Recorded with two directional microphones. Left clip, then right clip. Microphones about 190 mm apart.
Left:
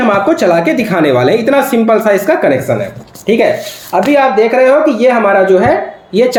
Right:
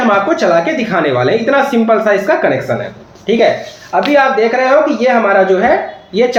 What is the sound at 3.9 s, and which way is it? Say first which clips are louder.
A man's voice: left 1 dB; 45° left (ahead or behind).